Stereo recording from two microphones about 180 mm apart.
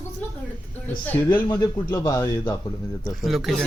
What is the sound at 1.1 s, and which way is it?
Speech, 10° left (ahead or behind).